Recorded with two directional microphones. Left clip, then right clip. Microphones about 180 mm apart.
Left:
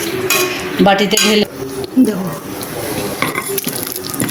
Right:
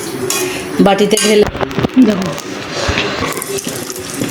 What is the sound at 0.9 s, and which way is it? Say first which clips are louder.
Speech: right 1 dB; 40° right (ahead or behind).